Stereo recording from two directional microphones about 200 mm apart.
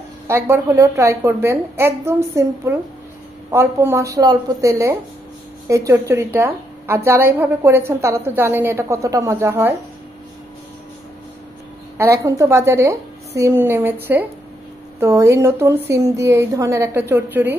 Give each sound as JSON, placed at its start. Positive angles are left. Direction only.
{"t": 0.3, "sound": "a woman's voice", "side_deg": -15}
{"t": 12.0, "sound": "a woman's voice", "side_deg": -15}